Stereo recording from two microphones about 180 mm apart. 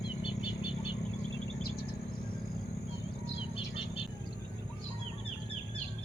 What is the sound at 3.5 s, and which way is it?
Bird, 30° left (ahead or behind).